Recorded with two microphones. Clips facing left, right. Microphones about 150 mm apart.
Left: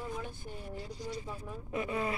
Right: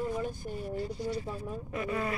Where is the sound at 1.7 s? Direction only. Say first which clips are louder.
Even; 15° left (ahead or behind).